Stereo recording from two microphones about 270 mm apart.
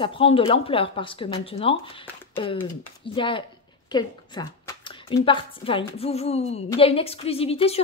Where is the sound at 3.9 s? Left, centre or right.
Centre.